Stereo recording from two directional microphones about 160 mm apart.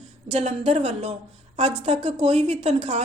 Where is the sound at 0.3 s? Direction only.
40° right (ahead or behind).